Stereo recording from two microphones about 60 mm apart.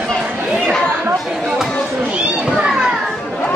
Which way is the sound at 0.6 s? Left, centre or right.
Centre.